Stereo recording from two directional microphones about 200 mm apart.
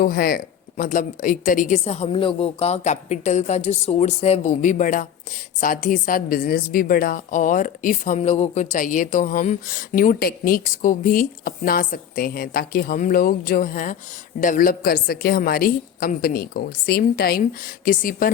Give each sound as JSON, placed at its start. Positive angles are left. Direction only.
{"t": 0.0, "sound": "a woman's voice", "side_deg": 45}